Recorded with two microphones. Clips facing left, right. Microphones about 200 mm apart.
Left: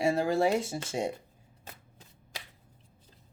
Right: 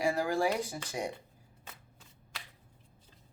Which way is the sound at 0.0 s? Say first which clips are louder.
Left 4 dB; 25° left (ahead or behind).